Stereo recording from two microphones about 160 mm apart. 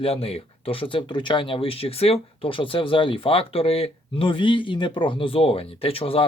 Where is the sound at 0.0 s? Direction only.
40° left (ahead or behind).